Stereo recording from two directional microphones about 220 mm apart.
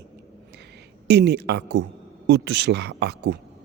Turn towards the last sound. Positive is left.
turn(degrees=-50)  # may be behind; listen again after turning